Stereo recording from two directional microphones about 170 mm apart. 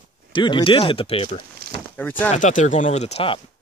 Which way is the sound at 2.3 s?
45° left (ahead or behind).